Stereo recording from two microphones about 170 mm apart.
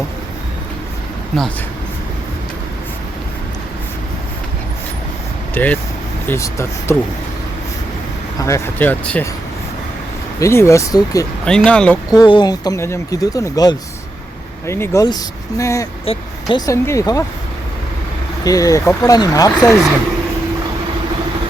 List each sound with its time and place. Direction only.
5.5 s speech: 10° left (ahead or behind)
8.4 s speech: 20° left (ahead or behind)
10.4 s speech: 15° left (ahead or behind)
11.4 s speech: 5° left (ahead or behind)
12.1 s speech: 25° left (ahead or behind)
18.4 s speech: 20° left (ahead or behind)